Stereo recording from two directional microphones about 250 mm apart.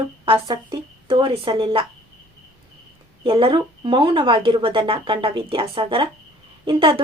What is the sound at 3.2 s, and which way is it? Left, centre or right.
Speech, right.